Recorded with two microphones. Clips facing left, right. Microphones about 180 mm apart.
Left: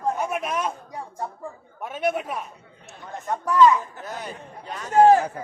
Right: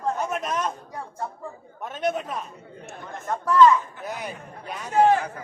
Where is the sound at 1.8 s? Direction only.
10° left (ahead or behind).